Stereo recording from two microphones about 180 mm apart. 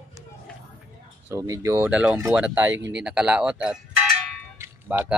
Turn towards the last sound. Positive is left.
turn(degrees=-10)  # may be behind; listen again after turning